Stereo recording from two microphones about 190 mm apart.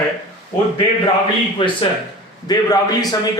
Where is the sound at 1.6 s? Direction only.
25° left (ahead or behind).